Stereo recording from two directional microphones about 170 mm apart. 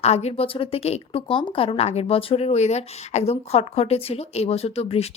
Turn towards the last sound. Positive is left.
turn(degrees=35)  # may be behind; listen again after turning